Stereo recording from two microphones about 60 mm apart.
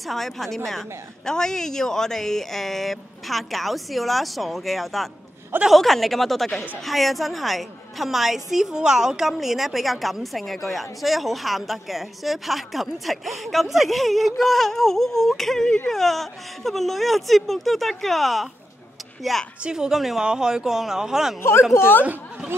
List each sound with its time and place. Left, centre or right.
0.0 s a woman's voice: centre
19.6 s speech: centre
21.4 s speech: left